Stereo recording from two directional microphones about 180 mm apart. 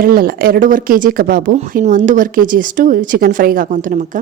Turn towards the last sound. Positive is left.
turn(degrees=-45)  # may be behind; listen again after turning